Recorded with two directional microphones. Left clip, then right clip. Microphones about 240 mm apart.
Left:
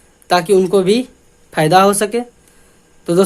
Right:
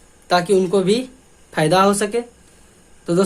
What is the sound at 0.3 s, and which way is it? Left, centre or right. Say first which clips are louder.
Speech: left 4 dB; left.